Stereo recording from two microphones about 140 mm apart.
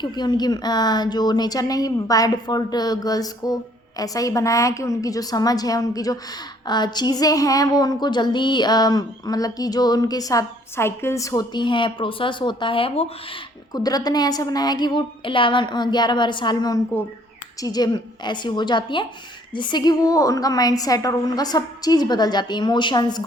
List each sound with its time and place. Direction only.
0.0 s speech: 30° left (ahead or behind)
13.7 s a woman's voice: 30° left (ahead or behind)